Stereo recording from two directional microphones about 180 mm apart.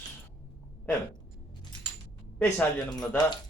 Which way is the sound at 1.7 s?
25° left (ahead or behind).